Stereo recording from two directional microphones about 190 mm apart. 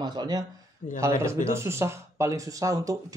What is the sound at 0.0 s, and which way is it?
Speech, 20° right (ahead or behind).